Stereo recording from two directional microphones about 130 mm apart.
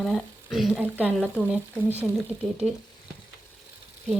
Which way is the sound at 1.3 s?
15° right (ahead or behind).